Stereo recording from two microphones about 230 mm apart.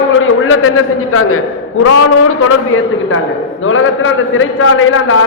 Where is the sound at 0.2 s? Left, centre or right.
Left.